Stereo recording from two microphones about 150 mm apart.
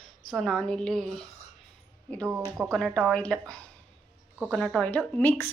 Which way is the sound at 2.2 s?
15° right (ahead or behind).